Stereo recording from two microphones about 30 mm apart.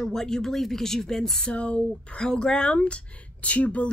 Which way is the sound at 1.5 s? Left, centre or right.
Left.